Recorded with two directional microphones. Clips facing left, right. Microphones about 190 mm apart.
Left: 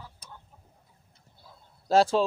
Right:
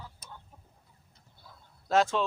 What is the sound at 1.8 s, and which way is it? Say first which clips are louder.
Speech: left 4 dB; 35° left (ahead or behind).